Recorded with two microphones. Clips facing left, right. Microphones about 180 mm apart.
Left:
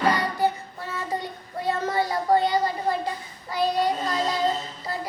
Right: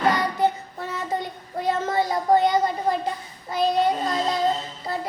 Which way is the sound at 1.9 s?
20° right (ahead or behind).